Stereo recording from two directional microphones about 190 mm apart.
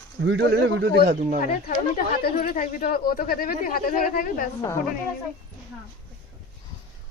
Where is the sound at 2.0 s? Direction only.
50° left (ahead or behind).